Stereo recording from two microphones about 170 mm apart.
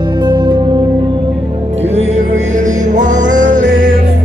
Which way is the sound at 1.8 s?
40° right (ahead or behind).